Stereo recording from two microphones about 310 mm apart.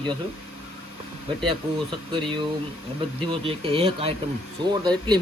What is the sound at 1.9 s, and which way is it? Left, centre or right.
Speech, centre.